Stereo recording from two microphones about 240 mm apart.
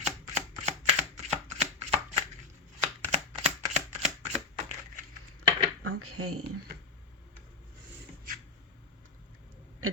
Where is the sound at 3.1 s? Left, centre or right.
Right.